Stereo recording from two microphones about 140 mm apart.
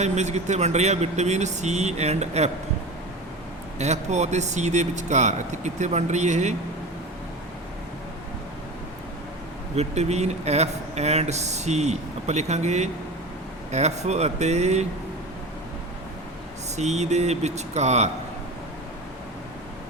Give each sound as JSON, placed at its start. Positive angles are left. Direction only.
{"t": 0.0, "sound": "speech", "side_deg": -55}
{"t": 3.8, "sound": "speech", "side_deg": -55}
{"t": 9.7, "sound": "speech", "side_deg": -50}
{"t": 16.7, "sound": "speech", "side_deg": -55}